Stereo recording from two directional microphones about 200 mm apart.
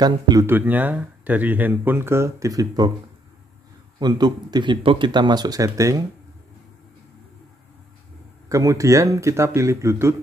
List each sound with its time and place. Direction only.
0.0 s speech: 20° right (ahead or behind)
4.0 s speech: 20° right (ahead or behind)
8.5 s speech: 15° right (ahead or behind)